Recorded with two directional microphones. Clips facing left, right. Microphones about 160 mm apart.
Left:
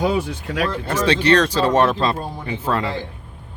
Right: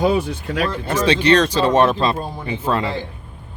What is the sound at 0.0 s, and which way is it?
Speech, 25° right (ahead or behind).